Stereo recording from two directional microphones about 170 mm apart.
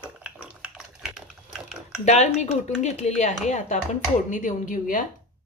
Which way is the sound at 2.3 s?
45° left (ahead or behind).